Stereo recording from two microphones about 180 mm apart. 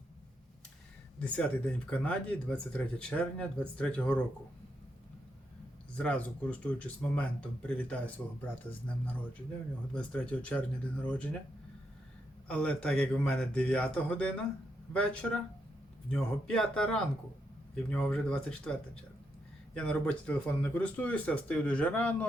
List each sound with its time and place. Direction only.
1.2 s speech: 5° left (ahead or behind)
6.0 s speech: 5° left (ahead or behind)
9.9 s speech: 5° left (ahead or behind)
12.5 s a man's voice: 5° left (ahead or behind)